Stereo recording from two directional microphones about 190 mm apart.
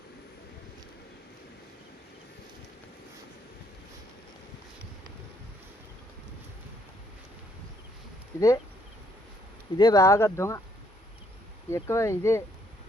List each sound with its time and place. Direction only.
8.4 s speech: 15° left (ahead or behind)
9.7 s speech: 20° left (ahead or behind)
11.7 s speech: 15° left (ahead or behind)